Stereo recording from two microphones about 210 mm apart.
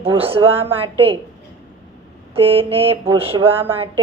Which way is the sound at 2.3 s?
25° right (ahead or behind).